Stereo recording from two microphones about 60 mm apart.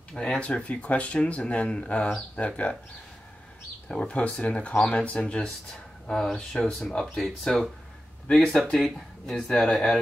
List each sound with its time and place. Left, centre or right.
0.1 s speech: centre
0.4 s speech: centre
3.9 s speech: centre